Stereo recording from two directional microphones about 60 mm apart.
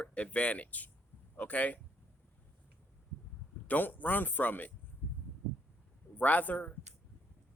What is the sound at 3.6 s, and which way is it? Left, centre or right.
Speech, left.